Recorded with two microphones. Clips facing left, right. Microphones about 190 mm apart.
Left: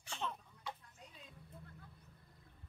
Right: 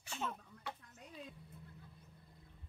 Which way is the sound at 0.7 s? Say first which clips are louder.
Even; 60° right (ahead or behind).